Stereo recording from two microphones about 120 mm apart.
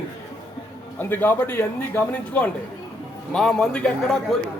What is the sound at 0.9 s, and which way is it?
A man's voice, 15° left (ahead or behind).